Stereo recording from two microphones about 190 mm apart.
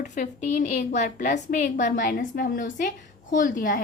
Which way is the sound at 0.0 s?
40° left (ahead or behind).